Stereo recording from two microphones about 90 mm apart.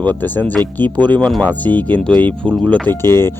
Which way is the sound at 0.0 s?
20° left (ahead or behind).